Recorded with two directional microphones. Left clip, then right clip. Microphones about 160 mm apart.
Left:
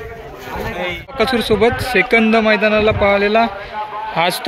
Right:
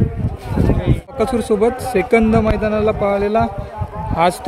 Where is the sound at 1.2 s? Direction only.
15° right (ahead or behind).